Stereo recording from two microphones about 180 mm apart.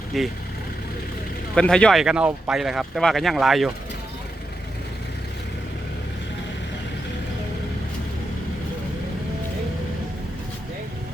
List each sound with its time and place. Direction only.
0.1 s speech: centre (ahead or behind)
1.5 s speech: 5° left (ahead or behind)